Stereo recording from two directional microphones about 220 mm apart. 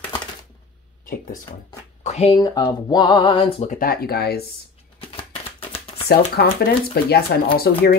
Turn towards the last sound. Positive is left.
turn(degrees=45)  # may be behind; listen again after turning